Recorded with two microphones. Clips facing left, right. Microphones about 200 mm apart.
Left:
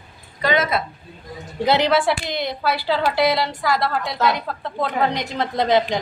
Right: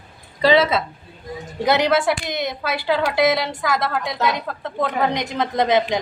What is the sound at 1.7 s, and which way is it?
A woman's voice, 20° right (ahead or behind).